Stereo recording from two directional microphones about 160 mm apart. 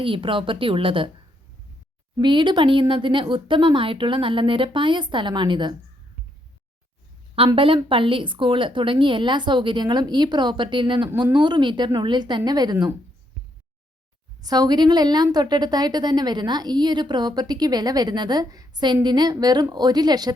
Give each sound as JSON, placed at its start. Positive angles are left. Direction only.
{"t": 0.0, "sound": "a woman's voice", "side_deg": -35}
{"t": 2.1, "sound": "a woman's voice", "side_deg": -30}
{"t": 7.3, "sound": "a woman's voice", "side_deg": -35}
{"t": 14.4, "sound": "a woman's voice", "side_deg": -25}